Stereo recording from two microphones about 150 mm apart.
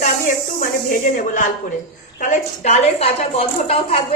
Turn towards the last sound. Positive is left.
turn(degrees=40)  # may be behind; listen again after turning